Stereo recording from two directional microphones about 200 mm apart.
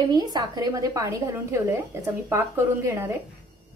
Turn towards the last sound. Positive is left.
turn(degrees=-10)  # may be behind; listen again after turning